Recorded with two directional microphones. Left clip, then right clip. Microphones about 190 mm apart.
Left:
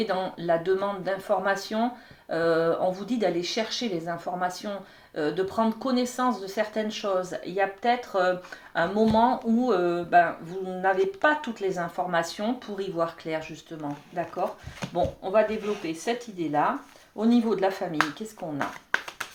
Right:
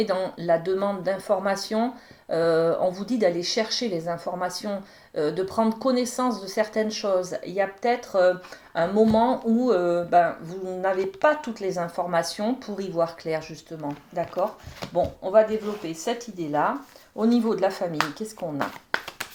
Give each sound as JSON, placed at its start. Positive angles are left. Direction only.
{"t": 0.0, "sound": "speech", "side_deg": -50}
{"t": 14.9, "sound": "speech", "side_deg": -45}
{"t": 17.9, "sound": "speech", "side_deg": -35}